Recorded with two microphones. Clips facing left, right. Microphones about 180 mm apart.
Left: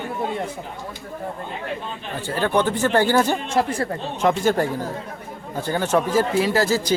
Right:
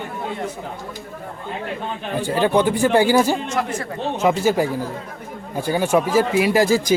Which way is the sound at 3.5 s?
30° left (ahead or behind).